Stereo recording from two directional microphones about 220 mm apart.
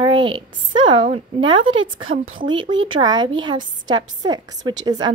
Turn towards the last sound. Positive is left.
turn(degrees=-20)  # may be behind; listen again after turning